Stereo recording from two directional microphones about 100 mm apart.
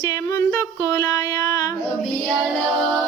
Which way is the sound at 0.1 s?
35° left (ahead or behind).